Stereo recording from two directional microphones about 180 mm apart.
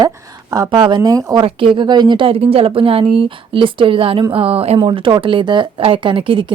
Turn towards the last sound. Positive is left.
turn(degrees=-30)  # may be behind; listen again after turning